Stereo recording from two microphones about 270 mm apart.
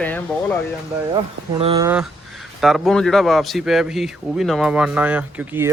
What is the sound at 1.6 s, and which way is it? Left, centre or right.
Speech, right.